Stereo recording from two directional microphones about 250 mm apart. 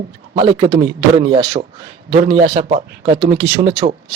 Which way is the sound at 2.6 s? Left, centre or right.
Right.